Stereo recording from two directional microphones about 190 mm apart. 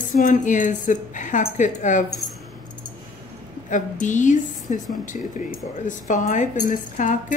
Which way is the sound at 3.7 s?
40° left (ahead or behind).